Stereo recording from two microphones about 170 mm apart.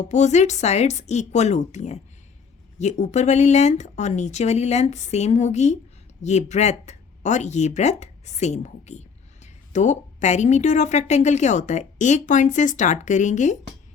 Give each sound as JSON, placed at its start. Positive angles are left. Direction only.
{"t": 0.0, "sound": "speech", "side_deg": 45}